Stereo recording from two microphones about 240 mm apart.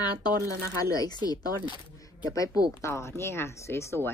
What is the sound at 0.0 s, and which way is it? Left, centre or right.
Speech, centre.